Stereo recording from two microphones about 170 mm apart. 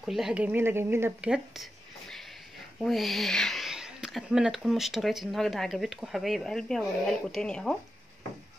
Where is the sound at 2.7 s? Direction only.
Centre (ahead or behind).